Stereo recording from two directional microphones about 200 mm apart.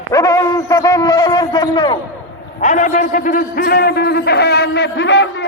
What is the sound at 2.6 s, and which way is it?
A man's voice, 40° left (ahead or behind).